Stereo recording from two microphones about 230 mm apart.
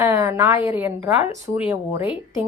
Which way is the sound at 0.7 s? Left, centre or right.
Centre.